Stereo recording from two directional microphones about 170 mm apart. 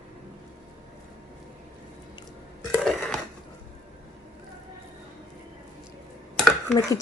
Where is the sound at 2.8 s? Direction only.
5° left (ahead or behind).